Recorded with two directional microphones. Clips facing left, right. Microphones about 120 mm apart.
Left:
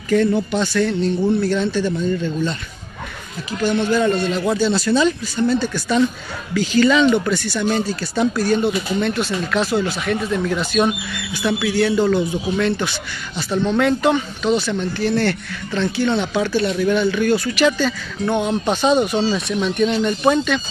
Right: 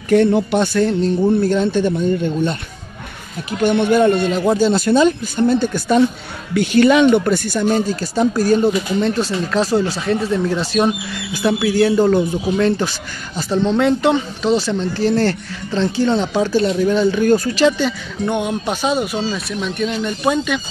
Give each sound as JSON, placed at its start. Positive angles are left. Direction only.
{"t": 0.1, "sound": "speech", "side_deg": -65}
{"t": 0.7, "sound": "speech", "side_deg": -40}
{"t": 3.6, "sound": "speech", "side_deg": -60}
{"t": 17.6, "sound": "speech", "side_deg": -20}